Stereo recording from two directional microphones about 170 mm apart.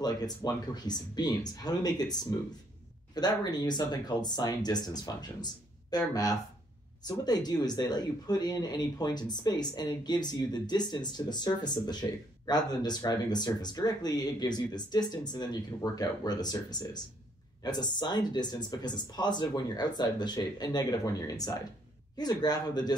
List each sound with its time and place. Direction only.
0.0 s speech: 25° left (ahead or behind)
3.2 s speech: 25° left (ahead or behind)
7.1 s speech: 25° left (ahead or behind)